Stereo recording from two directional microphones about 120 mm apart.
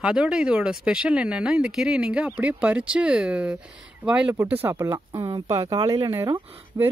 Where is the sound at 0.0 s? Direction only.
5° right (ahead or behind).